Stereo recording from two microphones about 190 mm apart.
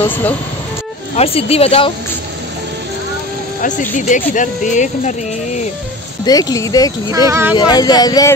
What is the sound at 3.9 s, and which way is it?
Speech, 40° left (ahead or behind).